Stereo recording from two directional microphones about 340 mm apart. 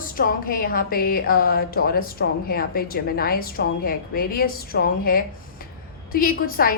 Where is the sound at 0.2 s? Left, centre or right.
Left.